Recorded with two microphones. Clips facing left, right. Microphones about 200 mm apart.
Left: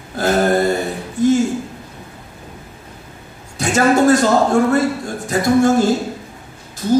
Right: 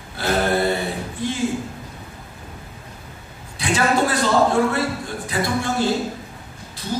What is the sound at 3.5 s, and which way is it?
A man's voice, 45° left (ahead or behind).